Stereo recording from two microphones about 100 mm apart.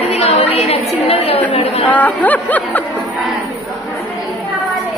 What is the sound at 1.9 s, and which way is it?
Speech, 15° left (ahead or behind).